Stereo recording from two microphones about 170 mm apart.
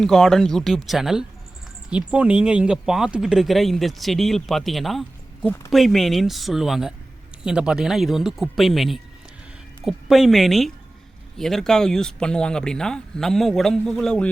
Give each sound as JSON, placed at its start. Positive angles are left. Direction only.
{"t": 0.0, "sound": "speech", "side_deg": 0}